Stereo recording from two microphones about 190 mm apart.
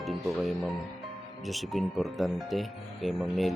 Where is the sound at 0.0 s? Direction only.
Centre (ahead or behind).